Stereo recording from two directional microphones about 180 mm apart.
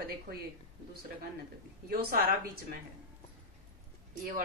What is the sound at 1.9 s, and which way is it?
Speech, 60° right (ahead or behind).